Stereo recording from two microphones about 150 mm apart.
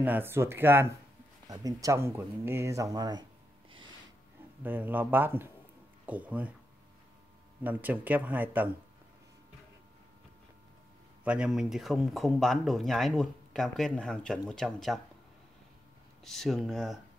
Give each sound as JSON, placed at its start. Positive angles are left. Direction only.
{"t": 0.0, "sound": "speech", "side_deg": -15}
{"t": 4.6, "sound": "speech", "side_deg": -10}
{"t": 7.6, "sound": "speech", "side_deg": -10}
{"t": 11.2, "sound": "speech", "side_deg": -5}
{"t": 16.3, "sound": "speech", "side_deg": 0}